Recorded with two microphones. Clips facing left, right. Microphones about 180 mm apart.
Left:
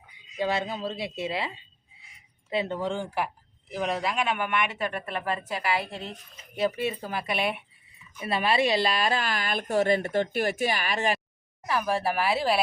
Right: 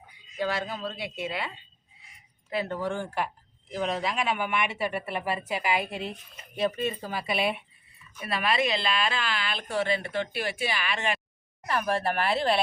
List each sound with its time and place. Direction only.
0.3 s speech: 25° left (ahead or behind)
2.5 s speech: 25° left (ahead or behind)
3.7 s a woman's voice: 5° left (ahead or behind); by 6.1 s 10° right (ahead or behind)
6.6 s speech: 10° left (ahead or behind)
8.2 s a woman's voice: 25° left (ahead or behind)
11.6 s speech: centre (ahead or behind)